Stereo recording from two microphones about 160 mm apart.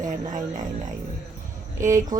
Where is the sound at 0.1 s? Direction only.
50° right (ahead or behind).